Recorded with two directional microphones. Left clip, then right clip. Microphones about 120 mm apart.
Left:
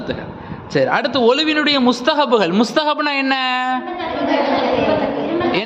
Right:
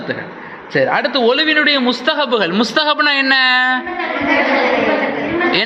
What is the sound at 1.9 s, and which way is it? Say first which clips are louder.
Speech: left 1 dB; 50° left (ahead or behind).